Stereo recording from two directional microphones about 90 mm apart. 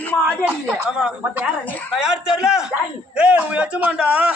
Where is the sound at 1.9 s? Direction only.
10° right (ahead or behind).